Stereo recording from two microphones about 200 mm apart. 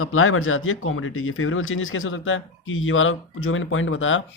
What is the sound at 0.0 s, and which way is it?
A man's voice, 90° left.